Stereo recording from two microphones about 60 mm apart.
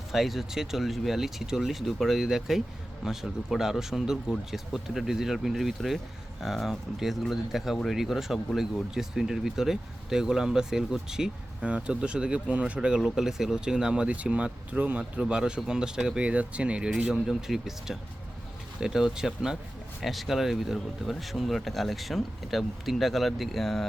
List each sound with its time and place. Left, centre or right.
0.1 s speech: centre
11.6 s speech: centre
15.2 s speech: centre
16.9 s speech: centre